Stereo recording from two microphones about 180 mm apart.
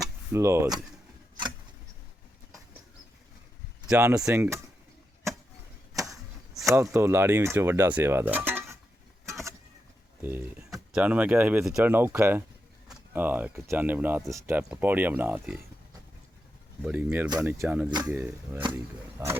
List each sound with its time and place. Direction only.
0.0 s a sound: 15° right (ahead or behind)
3.8 s speech: 5° right (ahead or behind)
6.7 s speech: 15° right (ahead or behind)
9.3 s vehicle: 15° right (ahead or behind)
10.2 s speech: 10° right (ahead or behind)
16.8 s speech: 10° right (ahead or behind)